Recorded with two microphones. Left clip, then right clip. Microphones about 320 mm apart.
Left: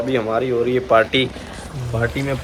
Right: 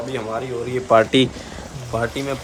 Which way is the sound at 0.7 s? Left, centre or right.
Right.